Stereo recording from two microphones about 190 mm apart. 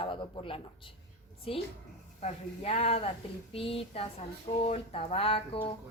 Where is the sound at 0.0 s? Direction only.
25° left (ahead or behind).